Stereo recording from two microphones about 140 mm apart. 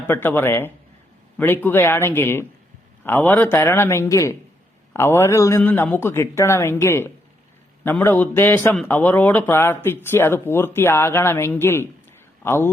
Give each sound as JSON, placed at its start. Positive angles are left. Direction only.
{"t": 0.1, "sound": "a man's voice", "side_deg": 15}